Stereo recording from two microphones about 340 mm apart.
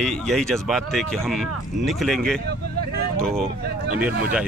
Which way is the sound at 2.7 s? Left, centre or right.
Right.